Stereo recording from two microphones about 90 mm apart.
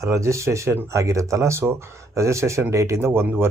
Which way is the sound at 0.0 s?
35° right (ahead or behind).